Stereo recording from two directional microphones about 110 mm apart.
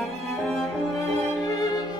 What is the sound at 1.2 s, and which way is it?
Music, 40° left (ahead or behind).